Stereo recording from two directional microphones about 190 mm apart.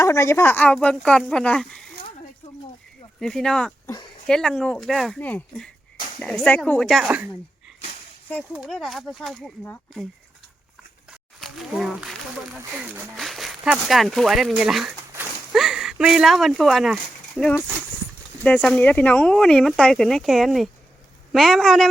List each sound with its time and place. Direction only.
0.0 s speech: 15° left (ahead or behind)
3.2 s speech: 5° left (ahead or behind)
3.8 s a sound: 20° left (ahead or behind)
4.3 s speech: 5° left (ahead or behind)
8.5 s speech: centre (ahead or behind)
11.3 s speech: centre (ahead or behind)